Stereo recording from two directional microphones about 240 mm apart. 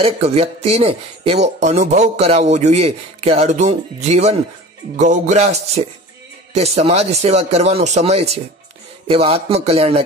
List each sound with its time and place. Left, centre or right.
0.0 s speech: right